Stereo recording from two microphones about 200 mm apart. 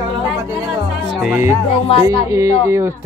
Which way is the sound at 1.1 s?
5° right (ahead or behind).